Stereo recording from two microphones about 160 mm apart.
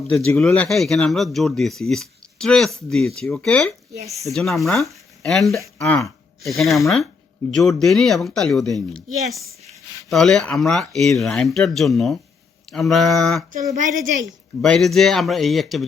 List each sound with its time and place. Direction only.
0.1 s speech: 5° left (ahead or behind)
10.1 s speech: 5° left (ahead or behind)
13.7 s a woman's voice: 55° right (ahead or behind)
14.6 s speech: centre (ahead or behind)